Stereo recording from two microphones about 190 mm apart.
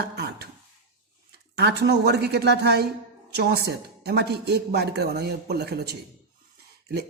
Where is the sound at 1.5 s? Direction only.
60° right (ahead or behind).